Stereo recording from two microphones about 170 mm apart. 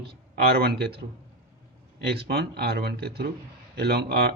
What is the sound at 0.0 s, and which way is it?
A man's voice, 70° right (ahead or behind).